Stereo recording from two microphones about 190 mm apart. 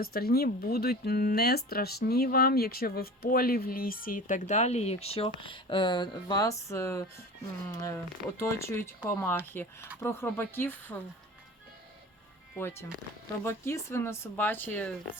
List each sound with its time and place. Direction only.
0.0 s speech: 55° left (ahead or behind); by 11.0 s 10° left (ahead or behind)
12.5 s speech: 15° left (ahead or behind)